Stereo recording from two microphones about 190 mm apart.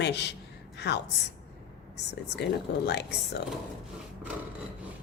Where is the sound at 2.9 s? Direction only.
60° left (ahead or behind).